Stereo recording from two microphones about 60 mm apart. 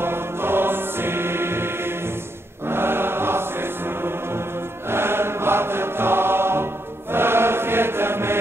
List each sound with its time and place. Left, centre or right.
0.0 s choir: right
2.7 s music: right